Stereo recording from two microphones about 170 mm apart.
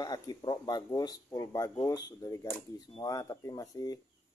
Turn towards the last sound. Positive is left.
turn(degrees=20)  # may be behind; listen again after turning